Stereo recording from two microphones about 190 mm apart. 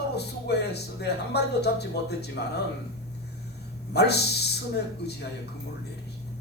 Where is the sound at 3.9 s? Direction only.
60° left (ahead or behind).